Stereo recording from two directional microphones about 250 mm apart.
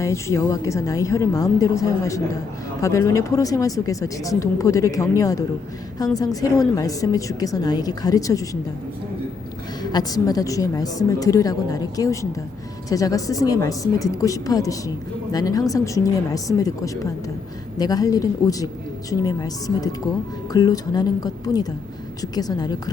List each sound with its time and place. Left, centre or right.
0.0 s speech: centre
9.9 s speech: centre